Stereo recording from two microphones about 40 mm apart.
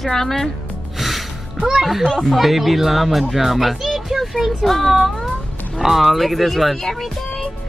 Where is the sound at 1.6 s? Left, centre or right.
Right.